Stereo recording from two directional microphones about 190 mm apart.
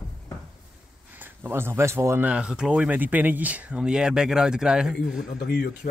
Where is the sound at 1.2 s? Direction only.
10° right (ahead or behind).